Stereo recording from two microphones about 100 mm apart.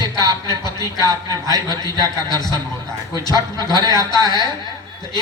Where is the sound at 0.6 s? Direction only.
45° left (ahead or behind).